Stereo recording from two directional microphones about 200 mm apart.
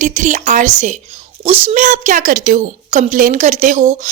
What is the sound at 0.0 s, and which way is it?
A woman's voice, 40° right (ahead or behind).